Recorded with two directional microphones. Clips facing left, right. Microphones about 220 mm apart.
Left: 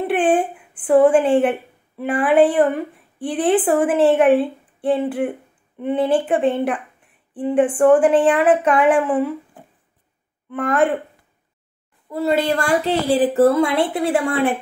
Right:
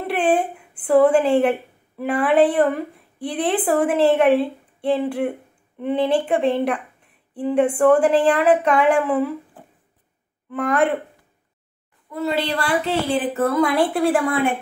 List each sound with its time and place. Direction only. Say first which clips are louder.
0.0 s a sound: left 3 dB; 5° left (ahead or behind)
1.0 s a woman's voice: left 1 dB; 5° left (ahead or behind)
10.5 s a woman's voice: left 1 dB; centre (ahead or behind)
12.1 s a woman's voice: left 4 dB; 40° left (ahead or behind); by 14.2 s 20° left (ahead or behind)